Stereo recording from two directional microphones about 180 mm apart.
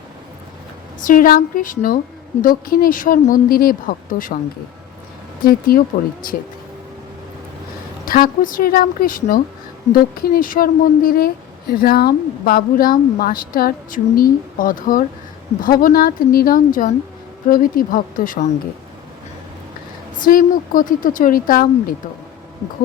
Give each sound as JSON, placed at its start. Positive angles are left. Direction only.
{"t": 1.0, "sound": "a woman's voice", "side_deg": 50}
{"t": 5.4, "sound": "a woman's voice", "side_deg": 50}
{"t": 8.0, "sound": "a woman's voice", "side_deg": 50}
{"t": 20.2, "sound": "a woman's voice", "side_deg": 50}